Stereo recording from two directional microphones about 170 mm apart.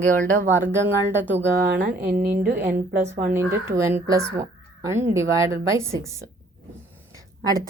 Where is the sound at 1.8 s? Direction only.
50° right (ahead or behind).